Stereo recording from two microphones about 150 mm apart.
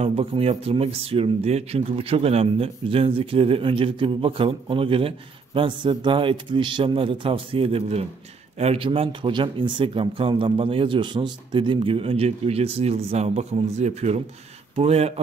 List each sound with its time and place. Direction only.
0.0 s speech: 40° right (ahead or behind)